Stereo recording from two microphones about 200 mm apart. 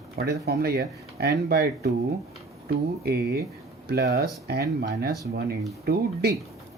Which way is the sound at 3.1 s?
50° right (ahead or behind).